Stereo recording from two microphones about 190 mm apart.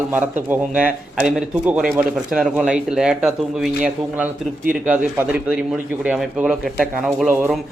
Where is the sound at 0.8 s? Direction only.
5° right (ahead or behind).